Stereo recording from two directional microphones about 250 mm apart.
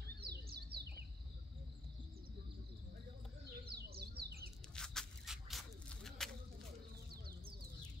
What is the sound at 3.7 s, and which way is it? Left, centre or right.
Bird, right.